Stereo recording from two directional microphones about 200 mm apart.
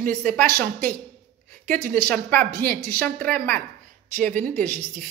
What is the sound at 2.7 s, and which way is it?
A woman's voice, 45° right (ahead or behind).